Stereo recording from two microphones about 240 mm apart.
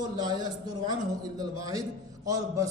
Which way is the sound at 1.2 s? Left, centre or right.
Centre.